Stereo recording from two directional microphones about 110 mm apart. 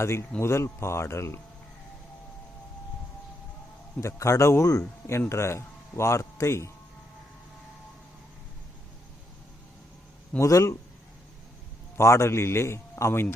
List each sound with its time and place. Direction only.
0.0 s speech: 25° left (ahead or behind)
4.0 s speech: 25° left (ahead or behind)
10.3 s speech: 25° left (ahead or behind)
11.9 s speech: 25° left (ahead or behind)